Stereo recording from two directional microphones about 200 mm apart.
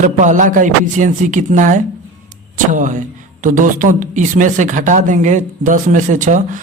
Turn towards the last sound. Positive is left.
turn(degrees=-40)  # may be behind; listen again after turning